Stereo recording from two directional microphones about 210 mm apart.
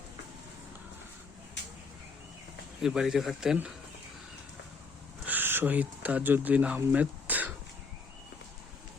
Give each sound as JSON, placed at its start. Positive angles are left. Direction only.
{"t": 1.6, "sound": "a sound", "side_deg": 60}
{"t": 2.8, "sound": "speech", "side_deg": 0}
{"t": 5.3, "sound": "speech", "side_deg": -10}